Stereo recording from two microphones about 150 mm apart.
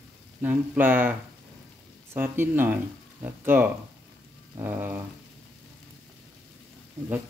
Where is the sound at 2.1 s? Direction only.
15° right (ahead or behind).